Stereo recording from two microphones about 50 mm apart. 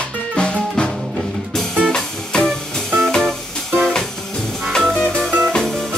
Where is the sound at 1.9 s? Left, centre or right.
Centre.